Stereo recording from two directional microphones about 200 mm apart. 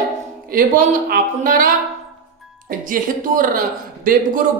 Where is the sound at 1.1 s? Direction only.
45° right (ahead or behind).